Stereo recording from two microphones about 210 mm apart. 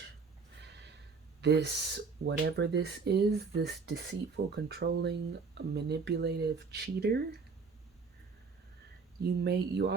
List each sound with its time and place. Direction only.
1.4 s speech: 55° right (ahead or behind)
9.4 s speech: 50° right (ahead or behind)